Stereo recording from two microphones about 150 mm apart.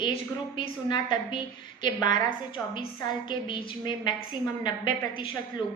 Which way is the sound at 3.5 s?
30° left (ahead or behind).